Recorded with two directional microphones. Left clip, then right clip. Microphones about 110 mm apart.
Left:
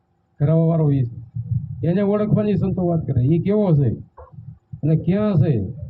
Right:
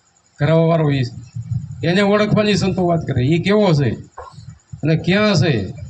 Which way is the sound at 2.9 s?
60° left (ahead or behind).